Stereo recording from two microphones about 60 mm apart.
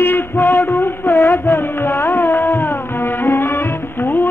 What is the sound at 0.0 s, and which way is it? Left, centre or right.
Music, left.